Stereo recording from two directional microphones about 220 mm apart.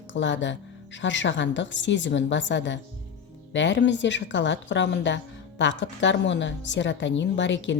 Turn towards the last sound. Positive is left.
turn(degrees=55)  # may be behind; listen again after turning